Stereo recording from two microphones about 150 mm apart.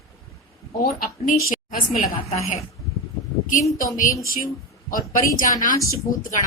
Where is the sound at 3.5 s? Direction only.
60° left (ahead or behind).